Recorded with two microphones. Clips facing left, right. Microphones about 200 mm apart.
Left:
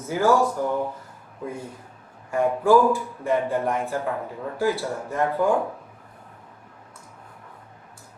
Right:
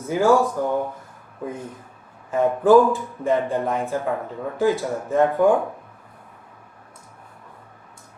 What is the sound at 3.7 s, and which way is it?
Speech, 15° right (ahead or behind).